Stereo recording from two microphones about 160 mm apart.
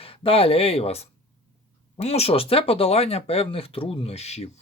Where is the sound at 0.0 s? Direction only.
35° left (ahead or behind).